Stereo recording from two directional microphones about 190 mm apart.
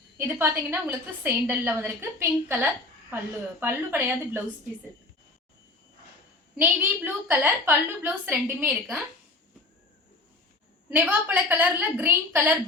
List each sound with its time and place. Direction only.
0.2 s a woman's voice: 10° right (ahead or behind)
6.6 s a woman's voice: 10° right (ahead or behind)
10.8 s a woman's voice: 10° right (ahead or behind)